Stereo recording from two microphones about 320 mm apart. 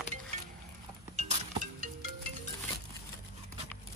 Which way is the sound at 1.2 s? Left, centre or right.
Right.